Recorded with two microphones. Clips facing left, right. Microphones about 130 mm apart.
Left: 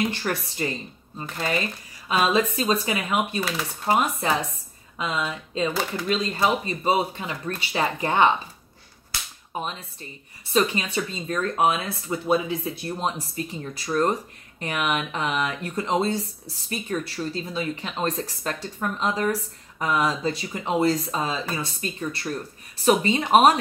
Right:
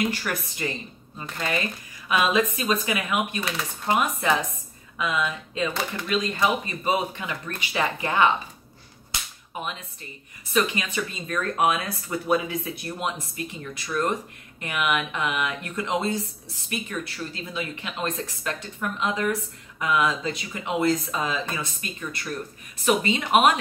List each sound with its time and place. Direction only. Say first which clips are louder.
0.1 s speech: left 2 dB; 30° left (ahead or behind)
2.0 s speech: left 1 dB; 30° left (ahead or behind)
9.5 s speech: left 2 dB; 30° left (ahead or behind)